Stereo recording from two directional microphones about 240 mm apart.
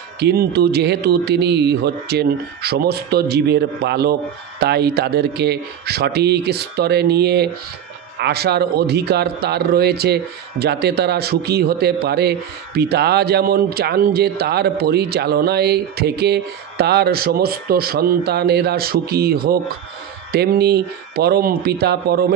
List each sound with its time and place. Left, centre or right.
0.2 s a man's voice: right